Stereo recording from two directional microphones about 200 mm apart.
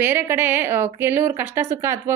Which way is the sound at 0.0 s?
10° right (ahead or behind).